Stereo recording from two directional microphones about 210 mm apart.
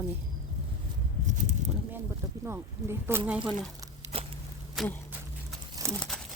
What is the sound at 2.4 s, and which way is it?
Speech, 10° right (ahead or behind).